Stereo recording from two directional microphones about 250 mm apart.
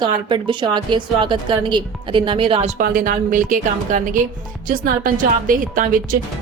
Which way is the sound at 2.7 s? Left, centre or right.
Right.